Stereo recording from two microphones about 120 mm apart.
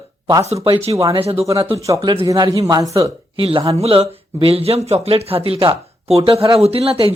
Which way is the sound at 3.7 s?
60° right (ahead or behind).